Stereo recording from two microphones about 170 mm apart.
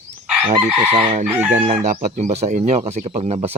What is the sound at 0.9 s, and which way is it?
Speech, 40° right (ahead or behind).